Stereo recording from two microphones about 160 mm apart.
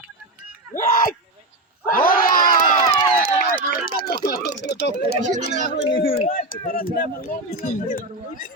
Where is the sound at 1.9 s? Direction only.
60° left (ahead or behind).